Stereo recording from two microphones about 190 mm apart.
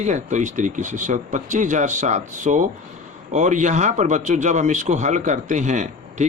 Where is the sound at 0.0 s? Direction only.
40° right (ahead or behind).